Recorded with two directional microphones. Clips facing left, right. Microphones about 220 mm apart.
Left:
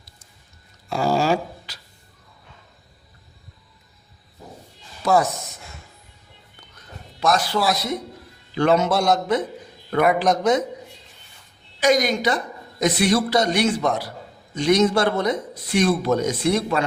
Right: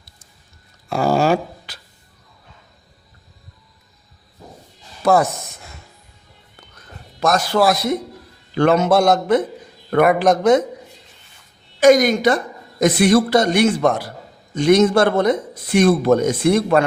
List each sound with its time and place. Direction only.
0.9 s a sound: 55° right (ahead or behind)
5.0 s speech: 55° right (ahead or behind)
7.2 s a man's voice: 45° right (ahead or behind)
11.8 s a man's voice: 50° right (ahead or behind)